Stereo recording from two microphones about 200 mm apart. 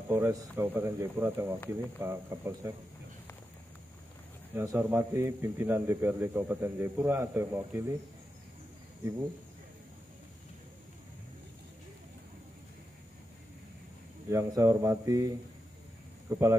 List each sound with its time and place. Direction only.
0.1 s a man's voice: 10° right (ahead or behind)
4.6 s a man's voice: 10° right (ahead or behind)
14.3 s a man's voice: 15° right (ahead or behind)